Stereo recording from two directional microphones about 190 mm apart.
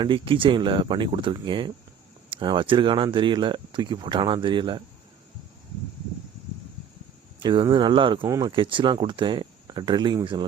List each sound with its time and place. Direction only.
0.0 s speech: 25° right (ahead or behind)
7.4 s speech: 25° right (ahead or behind)